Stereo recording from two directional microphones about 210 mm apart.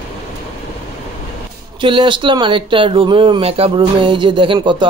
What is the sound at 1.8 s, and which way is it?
Speech, 25° right (ahead or behind).